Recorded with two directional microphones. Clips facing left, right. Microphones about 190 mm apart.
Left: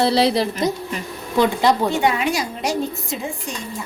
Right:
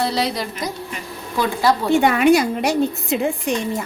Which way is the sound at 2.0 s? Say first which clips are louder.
Right 6 dB; 55° right (ahead or behind).